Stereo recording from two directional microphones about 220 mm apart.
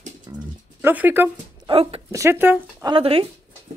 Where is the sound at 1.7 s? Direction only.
25° right (ahead or behind).